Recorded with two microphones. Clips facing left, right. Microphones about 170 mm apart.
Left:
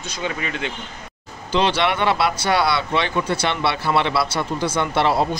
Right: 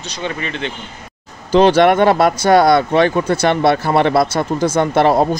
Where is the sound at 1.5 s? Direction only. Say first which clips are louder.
Right 9 dB; 45° right (ahead or behind).